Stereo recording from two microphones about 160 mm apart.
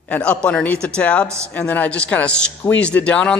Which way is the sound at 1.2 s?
20° right (ahead or behind).